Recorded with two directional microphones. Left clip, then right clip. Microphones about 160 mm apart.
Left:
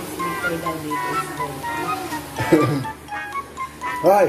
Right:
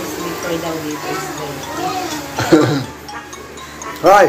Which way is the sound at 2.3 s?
15° left (ahead or behind).